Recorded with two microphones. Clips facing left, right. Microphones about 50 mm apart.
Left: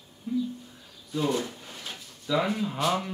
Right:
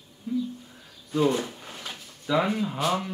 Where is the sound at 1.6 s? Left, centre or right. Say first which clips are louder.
Right 3 dB; right.